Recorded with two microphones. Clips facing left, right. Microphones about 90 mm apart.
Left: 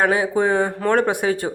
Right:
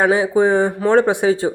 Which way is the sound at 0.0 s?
20° right (ahead or behind).